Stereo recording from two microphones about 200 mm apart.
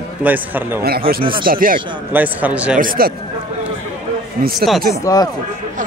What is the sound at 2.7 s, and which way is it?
Speech, 45° right (ahead or behind).